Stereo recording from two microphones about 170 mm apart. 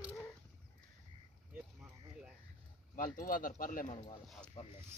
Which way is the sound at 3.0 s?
55° left (ahead or behind).